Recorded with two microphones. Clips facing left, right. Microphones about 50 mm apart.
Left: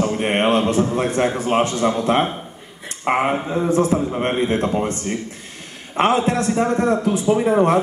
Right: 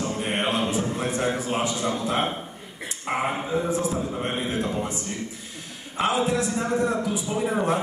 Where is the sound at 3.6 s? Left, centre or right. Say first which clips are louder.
Left 8 dB; left.